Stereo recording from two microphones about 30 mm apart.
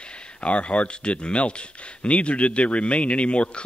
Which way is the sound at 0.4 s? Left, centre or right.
Left.